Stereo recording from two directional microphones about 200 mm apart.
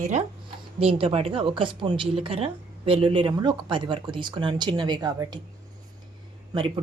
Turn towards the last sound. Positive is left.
turn(degrees=-25)  # may be behind; listen again after turning